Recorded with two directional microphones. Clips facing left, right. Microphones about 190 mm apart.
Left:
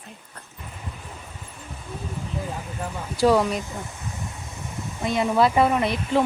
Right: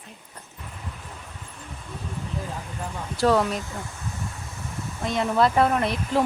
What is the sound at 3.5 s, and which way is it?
Speech, 15° left (ahead or behind).